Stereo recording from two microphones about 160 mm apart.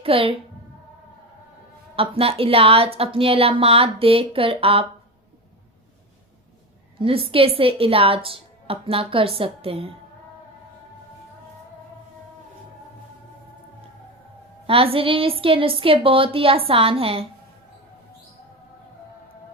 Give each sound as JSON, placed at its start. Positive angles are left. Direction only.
{"t": 0.0, "sound": "a woman's voice", "side_deg": -35}
{"t": 2.0, "sound": "a woman's voice", "side_deg": -35}
{"t": 7.0, "sound": "a woman's voice", "side_deg": -35}
{"t": 14.7, "sound": "a woman's voice", "side_deg": -35}